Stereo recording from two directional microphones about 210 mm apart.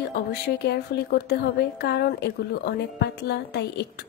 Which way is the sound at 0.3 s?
50° left (ahead or behind).